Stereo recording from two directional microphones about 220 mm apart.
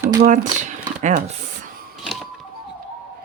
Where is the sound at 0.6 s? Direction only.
35° right (ahead or behind).